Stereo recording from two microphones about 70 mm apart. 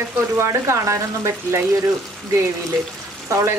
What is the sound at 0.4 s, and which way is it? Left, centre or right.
Speech, right.